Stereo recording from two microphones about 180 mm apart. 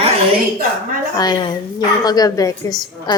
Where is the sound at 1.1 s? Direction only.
20° left (ahead or behind).